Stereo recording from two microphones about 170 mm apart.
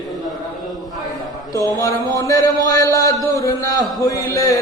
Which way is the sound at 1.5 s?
20° left (ahead or behind).